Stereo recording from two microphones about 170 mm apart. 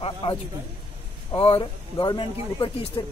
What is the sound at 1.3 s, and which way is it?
Speech, 30° left (ahead or behind).